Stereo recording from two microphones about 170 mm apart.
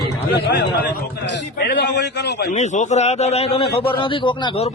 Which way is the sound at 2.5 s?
45° left (ahead or behind).